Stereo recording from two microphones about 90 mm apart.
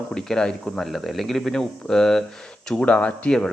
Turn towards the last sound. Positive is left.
turn(degrees=10)  # may be behind; listen again after turning